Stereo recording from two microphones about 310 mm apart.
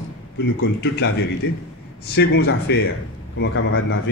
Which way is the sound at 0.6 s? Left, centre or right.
Left.